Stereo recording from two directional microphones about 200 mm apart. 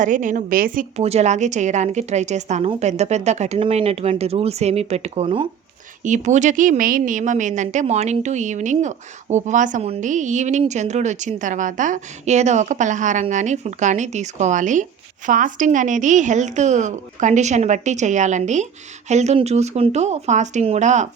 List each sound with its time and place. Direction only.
0.0 s a woman's voice: 40° right (ahead or behind)
6.1 s a woman's voice: 35° right (ahead or behind)